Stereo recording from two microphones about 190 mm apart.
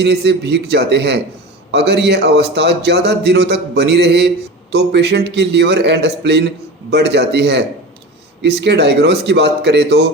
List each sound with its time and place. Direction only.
0.0 s a man's voice: 60° right (ahead or behind)